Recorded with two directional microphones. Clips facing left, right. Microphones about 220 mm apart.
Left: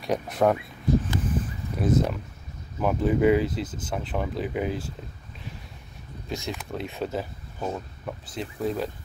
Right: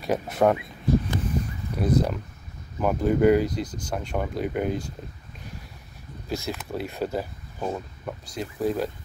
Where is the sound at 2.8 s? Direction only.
Centre (ahead or behind).